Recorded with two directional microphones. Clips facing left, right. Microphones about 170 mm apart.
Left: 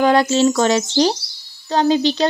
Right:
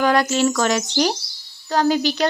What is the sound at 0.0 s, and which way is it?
Speech, 25° left (ahead or behind).